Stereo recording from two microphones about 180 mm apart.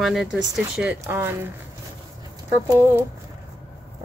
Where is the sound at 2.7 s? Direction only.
15° right (ahead or behind).